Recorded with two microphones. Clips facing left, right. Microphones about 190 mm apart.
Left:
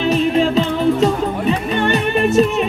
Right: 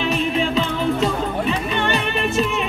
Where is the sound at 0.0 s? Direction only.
40° left (ahead or behind).